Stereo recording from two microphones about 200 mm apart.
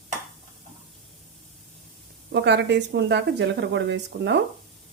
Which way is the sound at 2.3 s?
60° right (ahead or behind).